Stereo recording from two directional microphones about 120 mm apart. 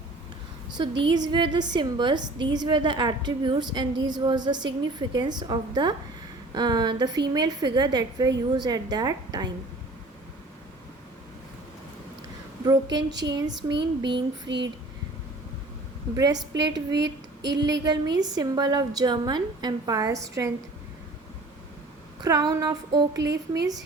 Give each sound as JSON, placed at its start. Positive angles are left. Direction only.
{"t": 0.8, "sound": "a woman's voice", "side_deg": -35}
{"t": 12.6, "sound": "a woman's voice", "side_deg": -35}
{"t": 16.1, "sound": "a woman's voice", "side_deg": -35}
{"t": 22.2, "sound": "a woman's voice", "side_deg": -30}